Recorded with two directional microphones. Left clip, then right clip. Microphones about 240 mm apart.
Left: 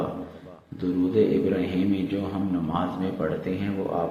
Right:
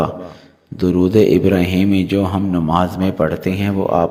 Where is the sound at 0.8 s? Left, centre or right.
Right.